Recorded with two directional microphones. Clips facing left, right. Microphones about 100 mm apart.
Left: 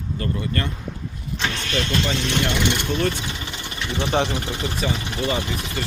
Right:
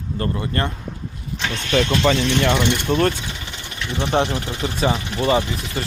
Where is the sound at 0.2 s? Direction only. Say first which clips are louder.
Right 3 dB; 40° right (ahead or behind).